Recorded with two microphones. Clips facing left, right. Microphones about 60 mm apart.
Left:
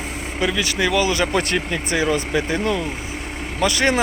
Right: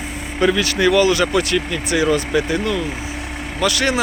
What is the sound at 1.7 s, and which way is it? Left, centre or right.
Speech, left.